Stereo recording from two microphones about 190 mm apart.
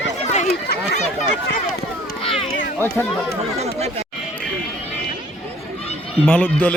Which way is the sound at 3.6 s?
35° right (ahead or behind).